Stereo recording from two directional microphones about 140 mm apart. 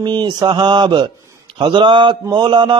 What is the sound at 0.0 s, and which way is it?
Mantra, 35° right (ahead or behind).